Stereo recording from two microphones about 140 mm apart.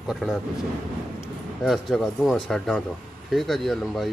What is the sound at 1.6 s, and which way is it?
A man's voice, centre (ahead or behind).